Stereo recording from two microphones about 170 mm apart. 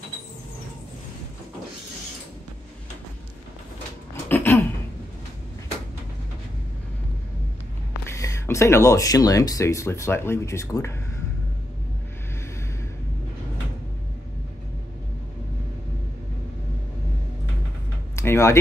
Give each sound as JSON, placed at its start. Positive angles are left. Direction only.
{"t": 4.1, "sound": "a sound", "side_deg": 15}
{"t": 8.1, "sound": "speech", "side_deg": 15}
{"t": 18.1, "sound": "typing", "side_deg": 15}